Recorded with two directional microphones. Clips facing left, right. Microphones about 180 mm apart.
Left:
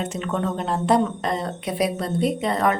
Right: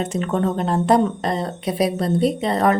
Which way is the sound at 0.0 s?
40° right (ahead or behind).